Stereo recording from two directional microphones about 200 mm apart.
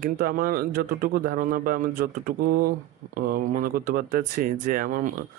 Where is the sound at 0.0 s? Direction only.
45° right (ahead or behind).